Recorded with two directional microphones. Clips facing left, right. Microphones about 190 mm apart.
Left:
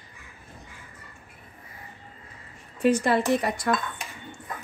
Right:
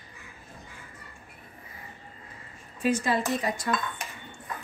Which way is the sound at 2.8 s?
65° left (ahead or behind).